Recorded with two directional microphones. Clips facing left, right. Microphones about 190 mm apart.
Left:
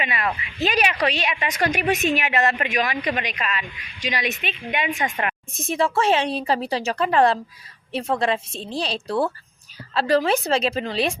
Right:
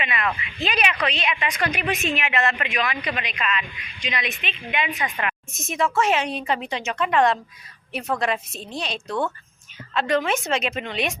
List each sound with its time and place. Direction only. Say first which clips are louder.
0.0 s speech: left 1 dB; 35° left (ahead or behind)
5.2 s a woman's voice: left 2 dB; 30° left (ahead or behind)